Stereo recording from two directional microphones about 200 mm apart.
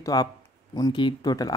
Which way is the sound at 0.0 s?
20° left (ahead or behind).